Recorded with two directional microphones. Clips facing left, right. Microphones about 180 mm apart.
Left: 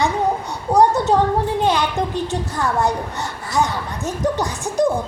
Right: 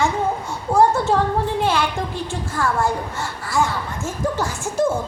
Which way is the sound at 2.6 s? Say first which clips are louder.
Even; 20° left (ahead or behind).